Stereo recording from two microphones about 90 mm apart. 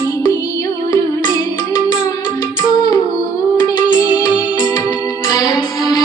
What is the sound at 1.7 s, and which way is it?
Music, 50° left (ahead or behind).